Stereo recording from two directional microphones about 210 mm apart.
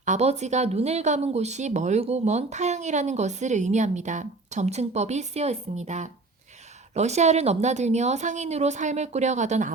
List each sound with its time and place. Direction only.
0.0 s speech: 35° right (ahead or behind)